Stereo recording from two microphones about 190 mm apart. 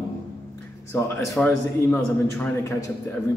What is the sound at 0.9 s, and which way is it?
A man's voice, 15° left (ahead or behind).